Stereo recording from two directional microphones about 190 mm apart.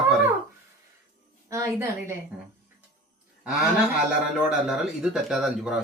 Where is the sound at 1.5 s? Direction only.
15° right (ahead or behind).